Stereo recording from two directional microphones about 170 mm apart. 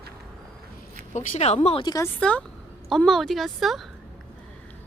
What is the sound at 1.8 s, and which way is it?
Speech, 20° left (ahead or behind).